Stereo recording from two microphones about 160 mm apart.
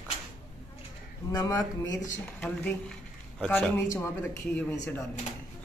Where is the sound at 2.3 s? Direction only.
10° left (ahead or behind).